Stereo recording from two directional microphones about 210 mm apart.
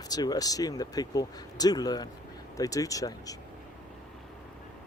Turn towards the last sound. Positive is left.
turn(degrees=15)  # may be behind; listen again after turning